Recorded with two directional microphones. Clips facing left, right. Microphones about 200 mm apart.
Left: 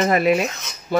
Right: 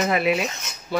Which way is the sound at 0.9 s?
45° left (ahead or behind).